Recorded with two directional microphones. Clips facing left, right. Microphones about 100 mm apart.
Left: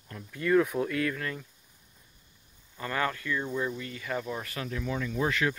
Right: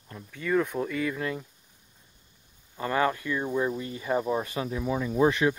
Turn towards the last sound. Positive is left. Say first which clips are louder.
# right 6 dB
turn(degrees=-20)  # may be behind; listen again after turning